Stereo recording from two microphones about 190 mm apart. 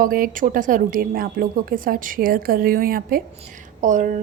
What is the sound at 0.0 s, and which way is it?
A woman's voice, 45° right (ahead or behind).